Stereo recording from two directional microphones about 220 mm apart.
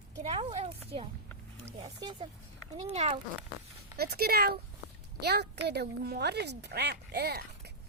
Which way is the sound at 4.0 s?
45° right (ahead or behind).